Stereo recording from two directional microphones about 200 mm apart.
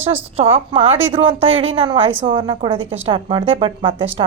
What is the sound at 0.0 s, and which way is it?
Speech, 10° right (ahead or behind).